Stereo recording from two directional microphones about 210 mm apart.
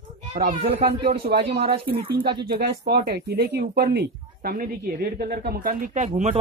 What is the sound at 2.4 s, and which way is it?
Speech, 50° right (ahead or behind).